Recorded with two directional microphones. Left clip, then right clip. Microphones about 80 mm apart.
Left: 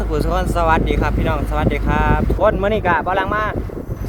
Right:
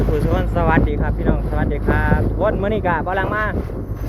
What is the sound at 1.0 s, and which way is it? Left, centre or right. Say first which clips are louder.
Speech: left 2 dB; left.